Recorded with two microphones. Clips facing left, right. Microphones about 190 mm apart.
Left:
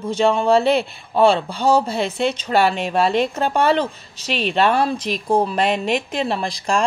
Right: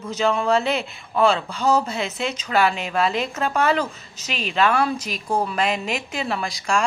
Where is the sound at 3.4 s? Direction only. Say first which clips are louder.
Left 3 dB; 30° left (ahead or behind).